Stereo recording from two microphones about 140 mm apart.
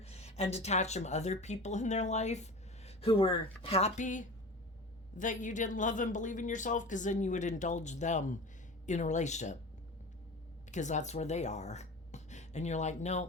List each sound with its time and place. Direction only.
0.0 s speech: 50° left (ahead or behind)
10.7 s speech: 60° left (ahead or behind)